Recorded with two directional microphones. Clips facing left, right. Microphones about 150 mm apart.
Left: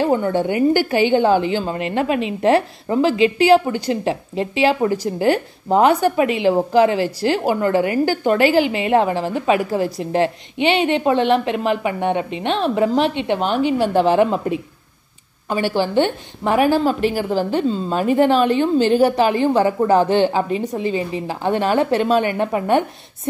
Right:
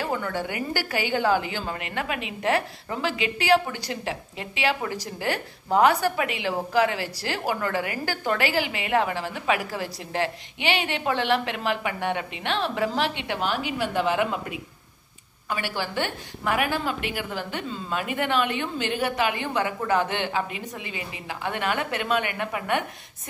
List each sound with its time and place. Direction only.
0.0 s a woman's voice: 25° left (ahead or behind)